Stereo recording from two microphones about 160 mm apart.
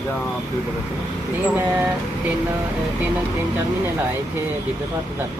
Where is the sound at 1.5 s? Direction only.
10° right (ahead or behind).